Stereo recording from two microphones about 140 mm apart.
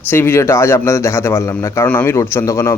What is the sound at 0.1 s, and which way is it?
A man's voice, 15° left (ahead or behind).